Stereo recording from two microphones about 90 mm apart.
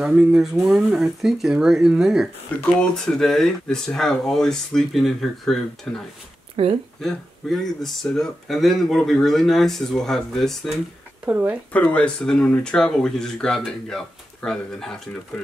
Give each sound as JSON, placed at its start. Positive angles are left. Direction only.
{"t": 0.0, "sound": "speech", "side_deg": -10}
{"t": 6.5, "sound": "speech", "side_deg": -90}
{"t": 7.0, "sound": "speech", "side_deg": 5}
{"t": 11.2, "sound": "speech", "side_deg": -20}
{"t": 11.7, "sound": "speech", "side_deg": 15}